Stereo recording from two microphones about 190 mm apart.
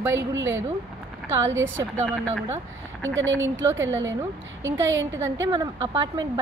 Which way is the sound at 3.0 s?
80° right.